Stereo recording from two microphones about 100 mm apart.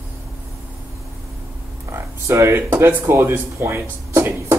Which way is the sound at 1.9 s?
30° right (ahead or behind).